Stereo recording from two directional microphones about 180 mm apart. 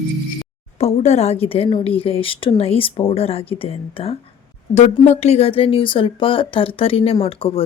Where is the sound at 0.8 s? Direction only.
40° left (ahead or behind).